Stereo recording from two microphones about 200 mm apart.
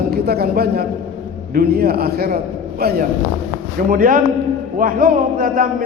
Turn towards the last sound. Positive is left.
turn(degrees=-45)  # may be behind; listen again after turning